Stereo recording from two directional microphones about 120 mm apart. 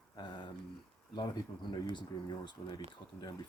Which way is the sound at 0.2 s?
40° left (ahead or behind).